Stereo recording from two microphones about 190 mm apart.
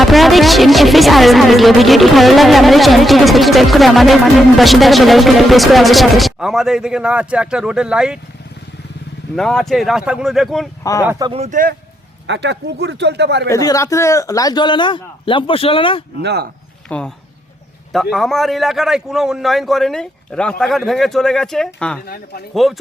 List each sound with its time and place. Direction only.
0.0 s speech: centre (ahead or behind)
9.3 s speech: 5° left (ahead or behind)
11.0 s speech: 10° right (ahead or behind)
11.3 s speech: 35° right (ahead or behind)
12.3 s speech: 65° right (ahead or behind)
13.5 s a man's voice: 15° left (ahead or behind)
16.2 s speech: 60° right (ahead or behind)
16.9 s speech: 10° left (ahead or behind)
22.0 s speech: 55° left (ahead or behind)
22.5 s speech: centre (ahead or behind)